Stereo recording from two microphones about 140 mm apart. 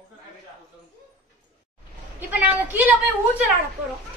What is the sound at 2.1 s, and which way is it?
A woman's voice, 10° right (ahead or behind).